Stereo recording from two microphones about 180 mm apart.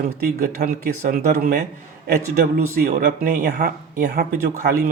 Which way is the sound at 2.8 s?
55° right (ahead or behind).